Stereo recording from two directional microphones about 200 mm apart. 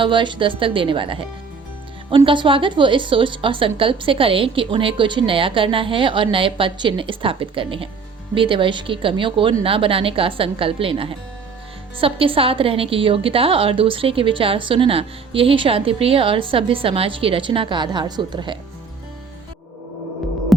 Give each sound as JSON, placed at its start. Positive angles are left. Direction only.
{"t": 0.0, "sound": "a woman's voice", "side_deg": -25}